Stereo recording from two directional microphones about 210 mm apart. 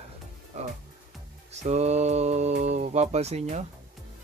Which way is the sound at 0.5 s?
35° right (ahead or behind).